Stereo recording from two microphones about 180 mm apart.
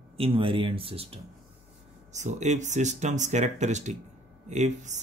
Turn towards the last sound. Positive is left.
turn(degrees=-40)  # may be behind; listen again after turning